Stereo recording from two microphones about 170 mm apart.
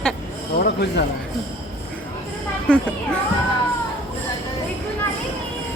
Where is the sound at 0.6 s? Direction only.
75° left (ahead or behind).